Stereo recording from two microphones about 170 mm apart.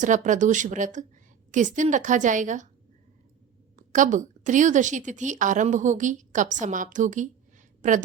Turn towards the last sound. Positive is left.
turn(degrees=-45)  # may be behind; listen again after turning